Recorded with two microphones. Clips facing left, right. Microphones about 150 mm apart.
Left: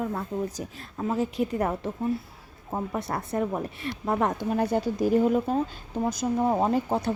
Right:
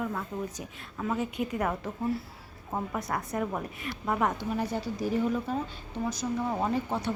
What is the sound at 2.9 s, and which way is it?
A woman's voice, 30° left (ahead or behind).